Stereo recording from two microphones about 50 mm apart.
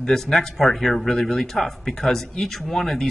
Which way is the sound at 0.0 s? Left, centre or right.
Centre.